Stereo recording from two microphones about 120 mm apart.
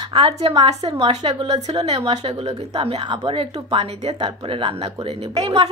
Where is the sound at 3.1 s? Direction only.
45° right (ahead or behind).